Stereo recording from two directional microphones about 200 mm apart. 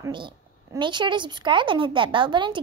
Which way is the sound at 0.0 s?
25° right (ahead or behind).